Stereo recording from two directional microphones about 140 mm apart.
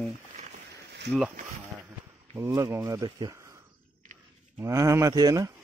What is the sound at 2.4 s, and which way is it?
Speech, 20° right (ahead or behind).